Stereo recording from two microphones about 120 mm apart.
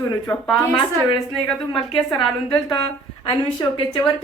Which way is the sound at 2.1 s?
45° left (ahead or behind).